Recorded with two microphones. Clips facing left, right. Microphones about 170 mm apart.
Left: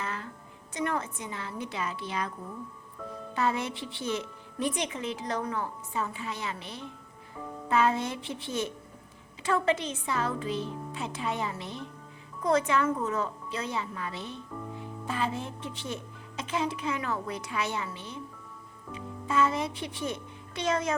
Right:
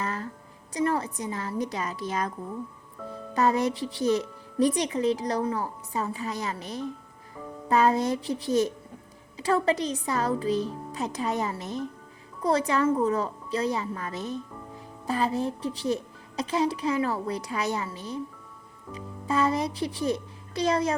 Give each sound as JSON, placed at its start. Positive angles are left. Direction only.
{"t": 0.0, "sound": "music", "side_deg": -40}
{"t": 0.7, "sound": "a woman's voice", "side_deg": -35}
{"t": 3.3, "sound": "a woman's voice", "side_deg": -40}